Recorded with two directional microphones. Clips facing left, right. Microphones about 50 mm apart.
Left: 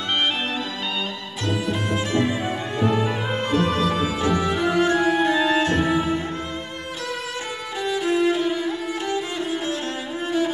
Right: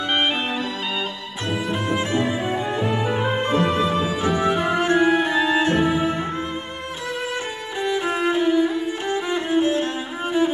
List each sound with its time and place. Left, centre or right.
2.0 s music: right
8.0 s violin: right
9.3 s cello: right